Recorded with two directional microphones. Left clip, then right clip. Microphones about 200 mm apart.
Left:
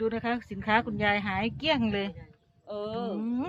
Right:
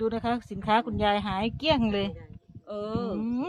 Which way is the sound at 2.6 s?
50° right (ahead or behind).